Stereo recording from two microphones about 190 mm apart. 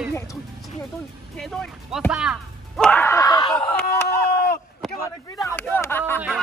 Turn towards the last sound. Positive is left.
turn(degrees=10)  # may be behind; listen again after turning